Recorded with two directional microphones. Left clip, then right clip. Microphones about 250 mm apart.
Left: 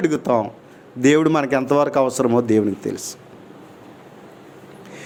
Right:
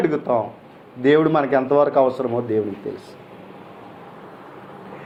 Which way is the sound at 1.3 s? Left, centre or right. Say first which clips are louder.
Even; left.